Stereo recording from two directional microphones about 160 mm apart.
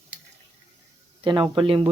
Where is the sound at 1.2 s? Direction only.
30° right (ahead or behind).